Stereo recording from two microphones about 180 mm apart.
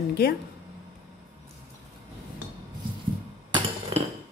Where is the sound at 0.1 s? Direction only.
60° left (ahead or behind).